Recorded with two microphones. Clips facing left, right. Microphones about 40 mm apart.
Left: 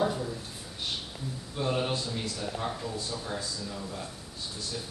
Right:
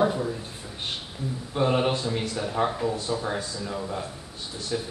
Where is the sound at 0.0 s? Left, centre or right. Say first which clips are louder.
Right 5 dB; right.